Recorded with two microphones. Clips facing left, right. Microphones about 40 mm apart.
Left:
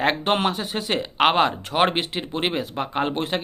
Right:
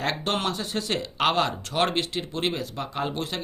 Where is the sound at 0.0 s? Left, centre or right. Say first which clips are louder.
Left 6 dB; left.